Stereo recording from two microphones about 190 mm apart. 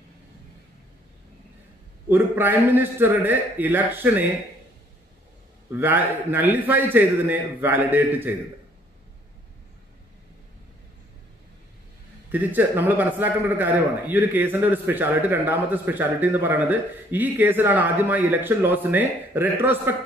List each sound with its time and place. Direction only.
2.0 s a man's voice: 10° right (ahead or behind)
5.7 s a man's voice: 10° right (ahead or behind)
12.3 s a man's voice: 10° right (ahead or behind)